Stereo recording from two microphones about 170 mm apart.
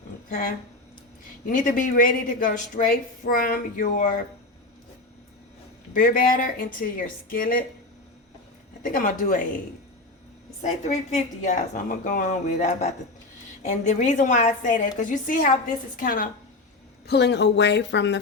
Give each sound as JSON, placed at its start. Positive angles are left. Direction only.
{"t": 0.3, "sound": "speech", "side_deg": 55}
{"t": 5.9, "sound": "a woman's voice", "side_deg": 50}
{"t": 8.8, "sound": "speech", "side_deg": 50}
{"t": 10.6, "sound": "a woman's voice", "side_deg": 45}
{"t": 17.1, "sound": "speech", "side_deg": 80}